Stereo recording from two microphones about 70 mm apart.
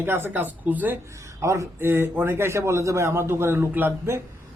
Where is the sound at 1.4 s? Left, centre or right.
Right.